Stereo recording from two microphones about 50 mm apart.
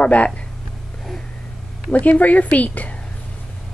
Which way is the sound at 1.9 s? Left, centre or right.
Left.